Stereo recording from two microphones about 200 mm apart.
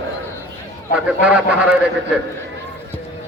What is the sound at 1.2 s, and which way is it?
Speech, 5° right (ahead or behind).